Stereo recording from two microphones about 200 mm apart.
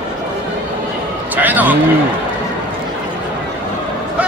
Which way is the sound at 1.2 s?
10° right (ahead or behind).